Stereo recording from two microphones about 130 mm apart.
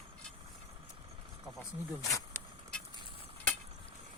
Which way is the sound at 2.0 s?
25° left (ahead or behind).